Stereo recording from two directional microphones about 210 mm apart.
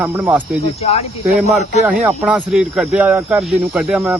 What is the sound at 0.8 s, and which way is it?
Speech, 30° left (ahead or behind).